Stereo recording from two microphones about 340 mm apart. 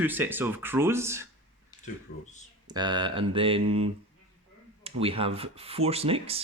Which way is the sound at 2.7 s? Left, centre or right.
Centre.